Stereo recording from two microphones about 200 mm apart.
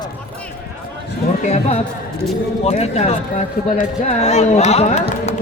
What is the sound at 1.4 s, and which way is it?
A man's voice, 35° left (ahead or behind).